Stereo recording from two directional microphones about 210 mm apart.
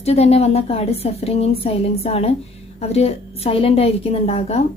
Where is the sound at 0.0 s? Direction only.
30° left (ahead or behind).